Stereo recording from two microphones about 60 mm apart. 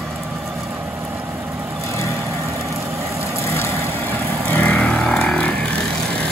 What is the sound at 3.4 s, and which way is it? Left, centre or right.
Vehicle, left.